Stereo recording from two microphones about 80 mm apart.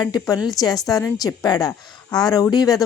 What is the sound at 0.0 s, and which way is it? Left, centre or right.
A woman's voice, left.